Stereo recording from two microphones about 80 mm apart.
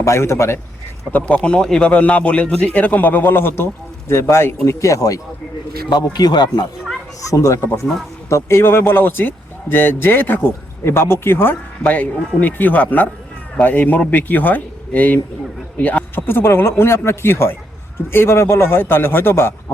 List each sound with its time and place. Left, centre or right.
0.0 s a man's voice: left
1.1 s a man's voice: centre; by 5.2 s left
5.9 s speech: left
7.2 s speech: left